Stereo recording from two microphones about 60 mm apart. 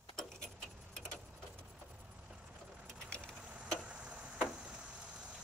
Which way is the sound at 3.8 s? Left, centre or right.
Centre.